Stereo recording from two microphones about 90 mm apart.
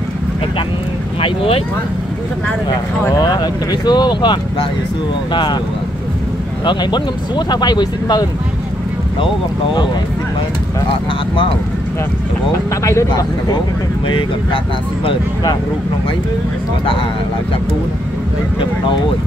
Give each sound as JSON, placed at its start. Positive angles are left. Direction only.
{"t": 1.2, "sound": "speech", "side_deg": 85}
{"t": 2.7, "sound": "speech", "side_deg": 45}
{"t": 6.6, "sound": "speech", "side_deg": 60}